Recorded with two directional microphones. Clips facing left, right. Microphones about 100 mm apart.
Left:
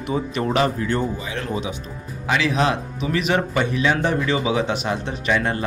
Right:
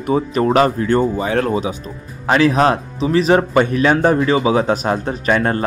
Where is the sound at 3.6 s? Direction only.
50° right (ahead or behind).